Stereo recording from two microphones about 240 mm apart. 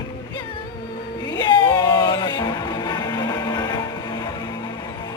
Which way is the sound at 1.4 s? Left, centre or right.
Centre.